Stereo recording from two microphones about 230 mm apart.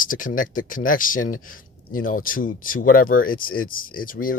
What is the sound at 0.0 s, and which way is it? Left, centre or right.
Speech, left.